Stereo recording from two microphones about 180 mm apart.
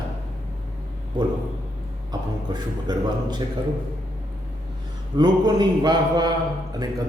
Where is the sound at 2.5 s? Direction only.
25° right (ahead or behind).